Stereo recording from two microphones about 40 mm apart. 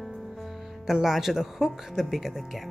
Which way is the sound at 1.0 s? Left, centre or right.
Centre.